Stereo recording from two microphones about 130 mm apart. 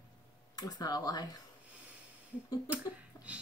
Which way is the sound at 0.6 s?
30° left (ahead or behind).